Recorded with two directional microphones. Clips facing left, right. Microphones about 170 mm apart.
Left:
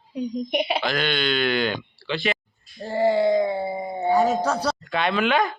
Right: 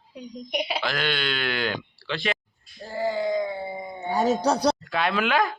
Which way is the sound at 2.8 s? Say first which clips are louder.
Left 7 dB; 35° left (ahead or behind).